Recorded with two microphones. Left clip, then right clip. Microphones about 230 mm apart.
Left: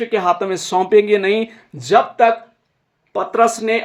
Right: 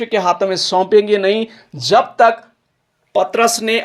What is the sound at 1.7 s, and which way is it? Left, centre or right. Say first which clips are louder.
Speech: right 1 dB; centre.